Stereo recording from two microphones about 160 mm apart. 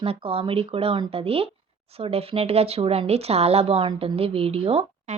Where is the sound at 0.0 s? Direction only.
40° right (ahead or behind).